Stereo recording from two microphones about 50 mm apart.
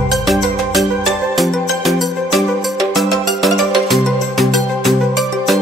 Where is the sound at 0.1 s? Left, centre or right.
Centre.